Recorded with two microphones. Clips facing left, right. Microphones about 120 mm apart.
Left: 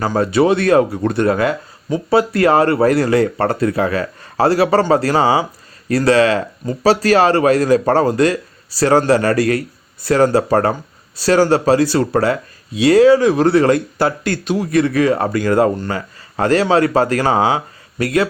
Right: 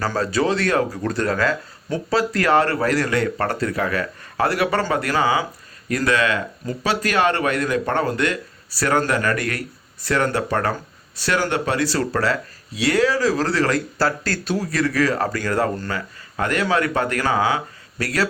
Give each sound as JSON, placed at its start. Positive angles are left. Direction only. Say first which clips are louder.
{"t": 0.0, "sound": "speech", "louder": "left 6 dB", "side_deg": 20}